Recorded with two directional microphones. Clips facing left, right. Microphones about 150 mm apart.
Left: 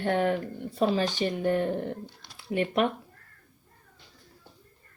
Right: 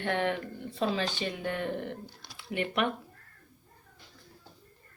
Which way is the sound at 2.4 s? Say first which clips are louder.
Left 5 dB; 35° left (ahead or behind).